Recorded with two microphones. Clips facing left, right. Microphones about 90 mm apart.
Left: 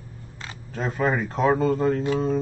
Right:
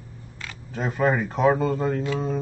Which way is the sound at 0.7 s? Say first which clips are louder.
Right 1 dB; 5° right (ahead or behind).